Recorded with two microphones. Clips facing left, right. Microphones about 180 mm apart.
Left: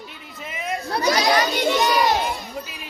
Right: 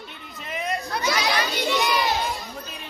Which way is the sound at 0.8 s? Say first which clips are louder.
Left 8 dB; 35° left (ahead or behind).